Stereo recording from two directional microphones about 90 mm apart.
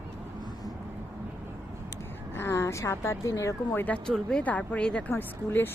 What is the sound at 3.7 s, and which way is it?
A woman's voice, 15° left (ahead or behind).